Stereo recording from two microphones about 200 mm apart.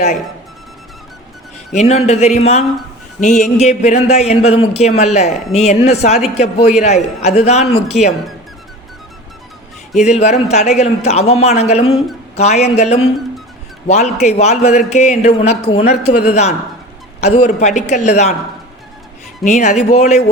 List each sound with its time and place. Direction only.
1.7 s a man's voice: 35° left (ahead or behind)
3.2 s a sound: 35° left (ahead or behind)
3.6 s a man's voice: 35° left (ahead or behind)
10.0 s a man's voice: 35° left (ahead or behind)
19.5 s a man's voice: 35° left (ahead or behind)